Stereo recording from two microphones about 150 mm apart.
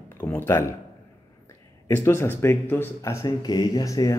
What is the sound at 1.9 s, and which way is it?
A man's voice, 15° left (ahead or behind).